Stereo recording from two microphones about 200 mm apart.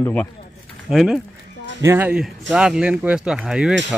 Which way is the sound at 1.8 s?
10° right (ahead or behind).